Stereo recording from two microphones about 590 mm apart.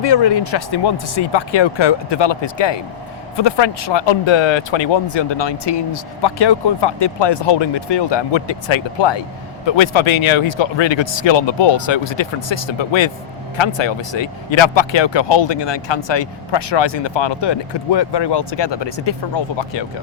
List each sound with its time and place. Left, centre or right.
0.0 s speech: left